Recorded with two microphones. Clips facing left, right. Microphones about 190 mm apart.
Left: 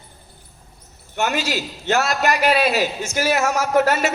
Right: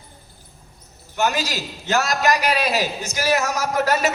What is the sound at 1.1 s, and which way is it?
A man's voice, 40° right (ahead or behind).